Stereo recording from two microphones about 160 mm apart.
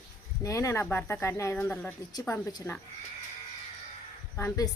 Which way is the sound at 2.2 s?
20° left (ahead or behind).